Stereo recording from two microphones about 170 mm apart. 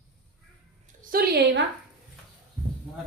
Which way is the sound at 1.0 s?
60° right (ahead or behind).